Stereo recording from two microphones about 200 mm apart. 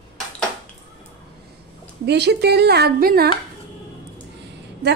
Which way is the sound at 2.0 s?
60° right (ahead or behind).